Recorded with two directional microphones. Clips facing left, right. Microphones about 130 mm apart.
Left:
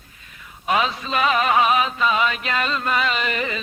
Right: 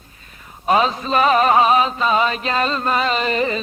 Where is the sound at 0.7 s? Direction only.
35° right (ahead or behind).